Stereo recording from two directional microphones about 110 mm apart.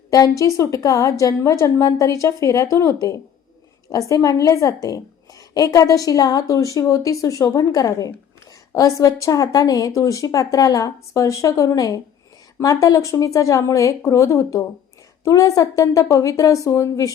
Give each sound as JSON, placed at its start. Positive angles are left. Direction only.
{"t": 0.1, "sound": "a woman's voice", "side_deg": 30}